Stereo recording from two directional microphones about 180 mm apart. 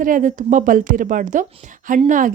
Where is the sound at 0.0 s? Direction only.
45° right (ahead or behind).